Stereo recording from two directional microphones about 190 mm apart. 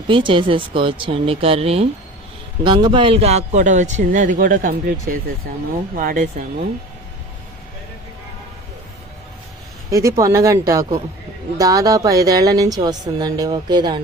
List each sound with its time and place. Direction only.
0.1 s a woman's voice: 25° right (ahead or behind); by 6.2 s 45° right (ahead or behind)
9.9 s a woman's voice: 15° right (ahead or behind)